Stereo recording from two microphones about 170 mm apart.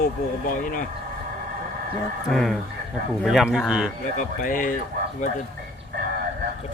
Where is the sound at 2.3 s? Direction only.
Centre (ahead or behind).